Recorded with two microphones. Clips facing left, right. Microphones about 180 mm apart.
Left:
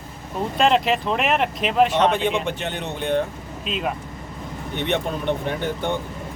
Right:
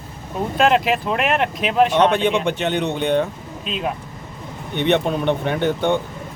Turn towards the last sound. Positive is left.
turn(degrees=-65)  # may be behind; listen again after turning